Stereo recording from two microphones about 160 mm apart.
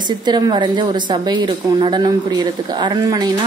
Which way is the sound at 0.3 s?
30° right (ahead or behind).